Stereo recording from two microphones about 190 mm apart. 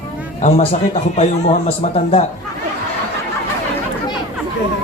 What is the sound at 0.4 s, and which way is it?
A man's voice, 35° left (ahead or behind).